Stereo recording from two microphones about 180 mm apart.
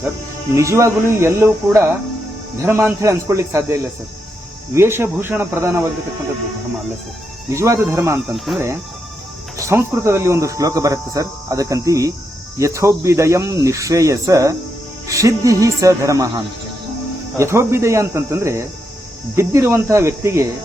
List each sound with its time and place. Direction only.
0.5 s speech: 15° right (ahead or behind)
7.5 s speech: 15° right (ahead or behind)
8.5 s speech: centre (ahead or behind)
9.6 s speech: 15° right (ahead or behind)
17.3 s speech: 15° right (ahead or behind)